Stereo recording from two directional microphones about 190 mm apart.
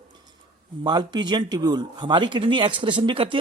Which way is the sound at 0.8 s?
25° right (ahead or behind).